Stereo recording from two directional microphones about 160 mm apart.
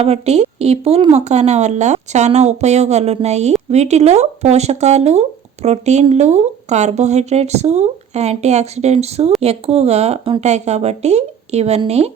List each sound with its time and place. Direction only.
0.0 s speech: 40° right (ahead or behind)